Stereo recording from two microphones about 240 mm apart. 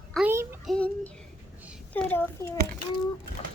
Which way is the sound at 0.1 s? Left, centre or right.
Centre.